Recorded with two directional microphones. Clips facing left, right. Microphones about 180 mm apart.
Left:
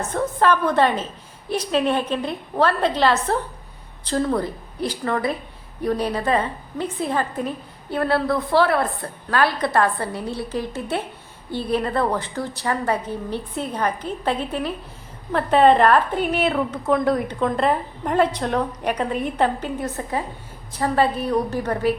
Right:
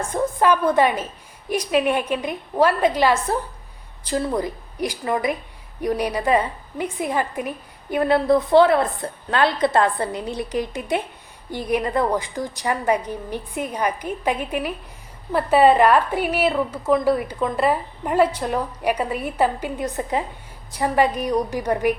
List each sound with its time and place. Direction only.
0.0 s a woman's voice: 10° right (ahead or behind)